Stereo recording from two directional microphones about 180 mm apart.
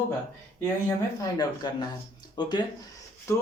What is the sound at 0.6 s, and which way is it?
Speech, 20° left (ahead or behind).